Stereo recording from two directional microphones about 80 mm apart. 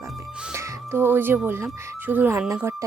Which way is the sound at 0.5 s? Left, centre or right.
Right.